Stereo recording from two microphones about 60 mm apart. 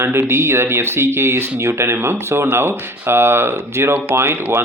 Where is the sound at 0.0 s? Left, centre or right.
Right.